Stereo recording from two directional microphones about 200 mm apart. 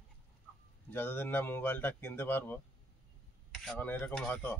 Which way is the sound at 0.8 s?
10° left (ahead or behind).